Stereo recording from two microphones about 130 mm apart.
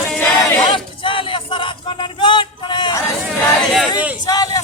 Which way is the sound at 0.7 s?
40° left (ahead or behind).